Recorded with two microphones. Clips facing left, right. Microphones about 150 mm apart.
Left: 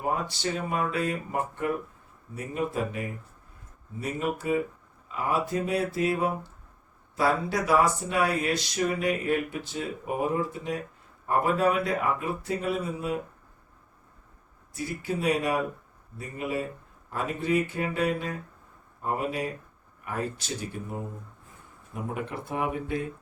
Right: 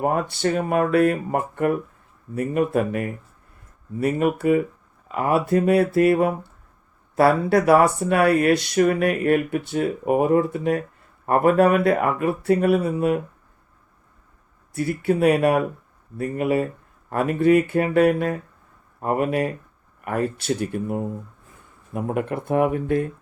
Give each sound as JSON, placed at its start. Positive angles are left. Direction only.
{"t": 0.0, "sound": "speech", "side_deg": -55}
{"t": 14.7, "sound": "speech", "side_deg": -60}